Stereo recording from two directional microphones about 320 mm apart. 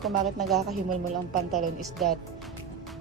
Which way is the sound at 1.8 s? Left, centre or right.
Centre.